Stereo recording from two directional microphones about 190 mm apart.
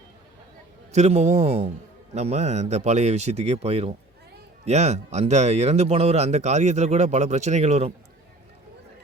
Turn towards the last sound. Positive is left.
turn(degrees=-35)  # may be behind; listen again after turning